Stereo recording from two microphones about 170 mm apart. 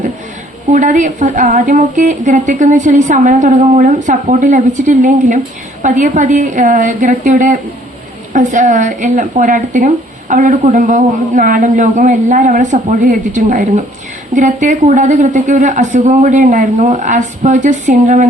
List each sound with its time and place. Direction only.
0.7 s speech: 45° right (ahead or behind)